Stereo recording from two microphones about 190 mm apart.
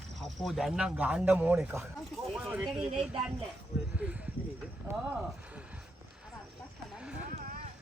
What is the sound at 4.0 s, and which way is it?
Speech, 5° right (ahead or behind).